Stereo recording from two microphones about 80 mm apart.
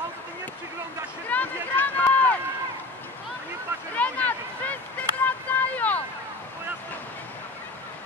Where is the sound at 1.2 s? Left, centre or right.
Left.